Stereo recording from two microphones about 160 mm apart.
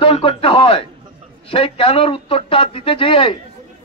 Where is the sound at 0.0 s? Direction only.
35° left (ahead or behind).